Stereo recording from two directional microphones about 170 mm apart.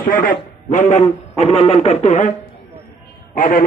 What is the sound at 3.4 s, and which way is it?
Speech, 55° left (ahead or behind).